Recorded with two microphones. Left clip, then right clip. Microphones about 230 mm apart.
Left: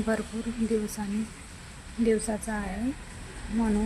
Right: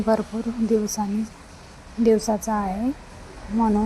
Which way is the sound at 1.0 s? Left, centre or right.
Centre.